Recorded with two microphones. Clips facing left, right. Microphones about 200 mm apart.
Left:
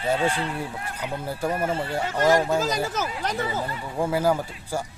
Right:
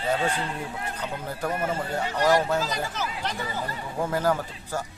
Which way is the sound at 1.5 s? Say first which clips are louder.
Left 2 dB; 30° left (ahead or behind).